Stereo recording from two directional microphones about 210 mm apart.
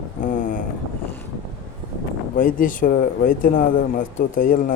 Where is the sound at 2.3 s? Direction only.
40° left (ahead or behind).